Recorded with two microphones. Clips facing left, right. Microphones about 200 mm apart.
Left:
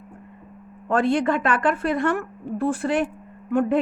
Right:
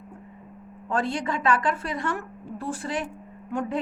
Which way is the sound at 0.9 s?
60° left (ahead or behind).